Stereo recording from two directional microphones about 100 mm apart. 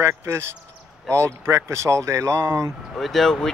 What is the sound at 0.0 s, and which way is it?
Speech, 25° right (ahead or behind).